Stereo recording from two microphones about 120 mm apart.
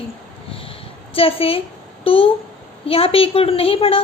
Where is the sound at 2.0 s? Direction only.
50° left (ahead or behind).